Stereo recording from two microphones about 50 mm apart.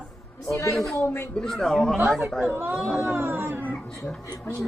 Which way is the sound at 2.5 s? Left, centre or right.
Right.